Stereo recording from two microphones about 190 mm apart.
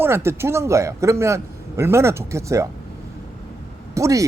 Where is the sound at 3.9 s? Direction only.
15° right (ahead or behind).